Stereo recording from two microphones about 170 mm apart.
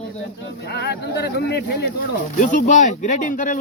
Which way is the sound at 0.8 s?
80° left.